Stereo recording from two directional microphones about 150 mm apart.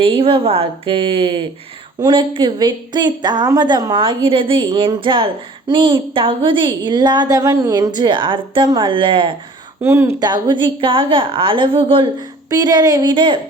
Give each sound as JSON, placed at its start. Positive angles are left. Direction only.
{"t": 0.0, "sound": "a woman's voice", "side_deg": -35}
{"t": 9.8, "sound": "a woman's voice", "side_deg": -15}
{"t": 12.5, "sound": "speech", "side_deg": -25}